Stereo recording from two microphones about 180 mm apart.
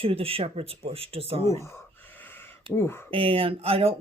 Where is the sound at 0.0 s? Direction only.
30° right (ahead or behind).